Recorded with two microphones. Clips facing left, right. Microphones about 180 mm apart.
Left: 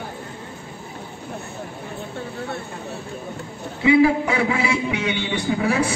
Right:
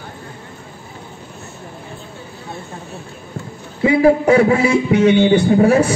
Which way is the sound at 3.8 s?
40° right (ahead or behind).